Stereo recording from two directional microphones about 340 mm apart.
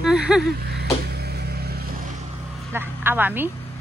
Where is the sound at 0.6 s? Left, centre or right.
Right.